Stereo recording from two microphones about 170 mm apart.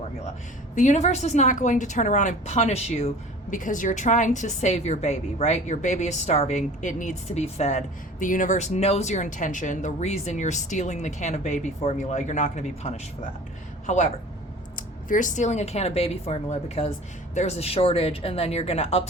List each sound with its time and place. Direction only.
0.8 s a woman's voice: 45° left (ahead or behind)
3.5 s a woman's voice: 50° left (ahead or behind)